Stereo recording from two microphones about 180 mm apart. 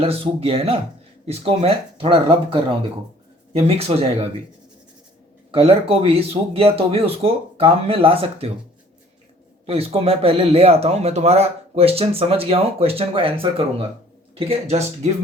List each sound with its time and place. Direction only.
0.0 s speech: 35° right (ahead or behind)
5.5 s speech: 30° right (ahead or behind)
9.6 s speech: 35° right (ahead or behind)